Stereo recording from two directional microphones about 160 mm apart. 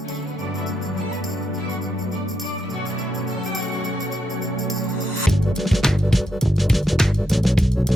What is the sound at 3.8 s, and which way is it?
Music, centre (ahead or behind).